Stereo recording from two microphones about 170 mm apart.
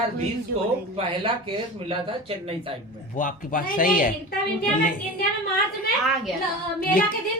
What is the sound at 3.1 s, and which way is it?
Speech, 50° left (ahead or behind).